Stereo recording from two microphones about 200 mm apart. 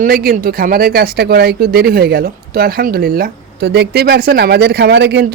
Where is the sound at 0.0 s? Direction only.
45° right (ahead or behind).